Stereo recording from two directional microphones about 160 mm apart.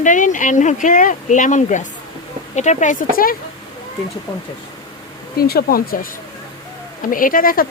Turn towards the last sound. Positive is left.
turn(degrees=60)  # may be behind; listen again after turning